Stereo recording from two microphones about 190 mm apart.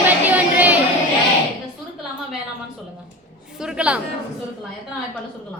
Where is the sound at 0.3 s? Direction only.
10° right (ahead or behind).